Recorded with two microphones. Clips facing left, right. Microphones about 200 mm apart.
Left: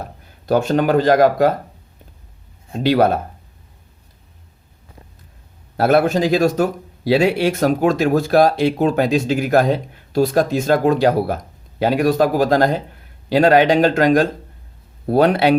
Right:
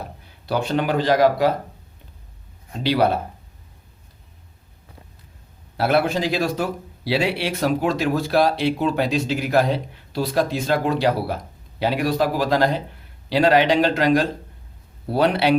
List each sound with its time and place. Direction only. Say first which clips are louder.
0.0 s speech: left 3 dB; 45° left (ahead or behind)
2.8 s speech: left 4 dB; 45° left (ahead or behind)
5.7 s speech: left 5 dB; 45° left (ahead or behind)